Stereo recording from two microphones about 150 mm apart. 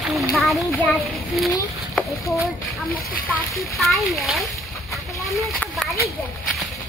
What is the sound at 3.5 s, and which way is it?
Speech, centre (ahead or behind).